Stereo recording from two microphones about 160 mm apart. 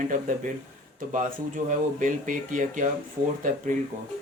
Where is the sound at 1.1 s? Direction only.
50° right (ahead or behind).